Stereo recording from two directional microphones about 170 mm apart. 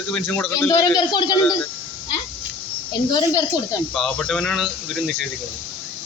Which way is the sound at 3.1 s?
20° left (ahead or behind).